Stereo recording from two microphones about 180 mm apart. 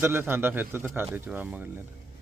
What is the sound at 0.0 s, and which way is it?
Speech, 10° right (ahead or behind).